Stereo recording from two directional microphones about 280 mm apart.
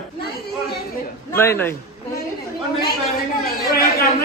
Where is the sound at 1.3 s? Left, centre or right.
Centre.